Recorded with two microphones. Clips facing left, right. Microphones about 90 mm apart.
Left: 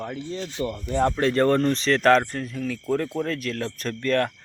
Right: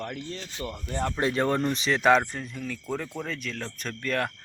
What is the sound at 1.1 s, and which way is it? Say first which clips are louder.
Speech: left 2 dB; 10° right (ahead or behind).